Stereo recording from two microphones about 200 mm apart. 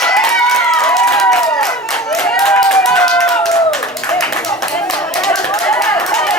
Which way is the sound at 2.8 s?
5° left (ahead or behind).